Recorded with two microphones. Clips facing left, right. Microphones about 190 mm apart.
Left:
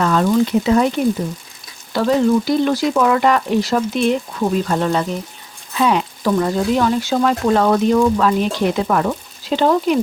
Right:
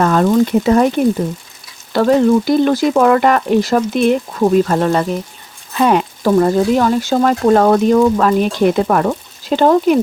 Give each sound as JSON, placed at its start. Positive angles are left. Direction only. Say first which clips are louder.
{"t": 0.0, "sound": "speech", "louder": "right 3 dB", "side_deg": -50}